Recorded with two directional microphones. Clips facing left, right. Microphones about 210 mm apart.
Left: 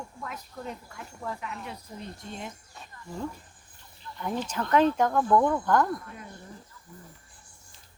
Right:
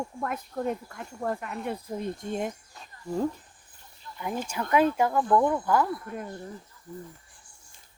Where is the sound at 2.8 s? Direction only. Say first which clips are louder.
Left 1 dB; centre (ahead or behind).